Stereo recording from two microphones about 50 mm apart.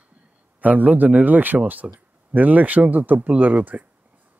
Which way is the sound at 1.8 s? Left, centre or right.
Right.